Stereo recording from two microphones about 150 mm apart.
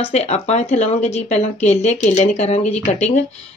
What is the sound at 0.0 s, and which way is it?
Speech, 45° left (ahead or behind).